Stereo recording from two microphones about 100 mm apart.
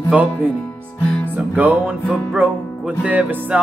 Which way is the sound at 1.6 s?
15° right (ahead or behind).